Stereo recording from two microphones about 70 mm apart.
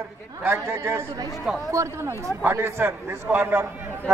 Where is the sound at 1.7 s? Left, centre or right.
Right.